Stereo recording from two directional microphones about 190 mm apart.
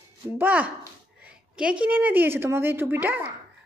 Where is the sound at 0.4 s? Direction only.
10° right (ahead or behind).